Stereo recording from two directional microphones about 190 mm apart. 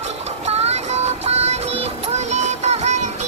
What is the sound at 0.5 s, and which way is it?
Music, 35° right (ahead or behind).